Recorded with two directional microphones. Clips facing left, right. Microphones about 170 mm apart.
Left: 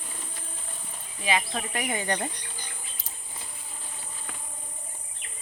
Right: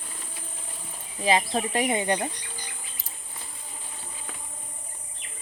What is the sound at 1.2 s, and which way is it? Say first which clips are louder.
Speech: right 5 dB; 35° right (ahead or behind).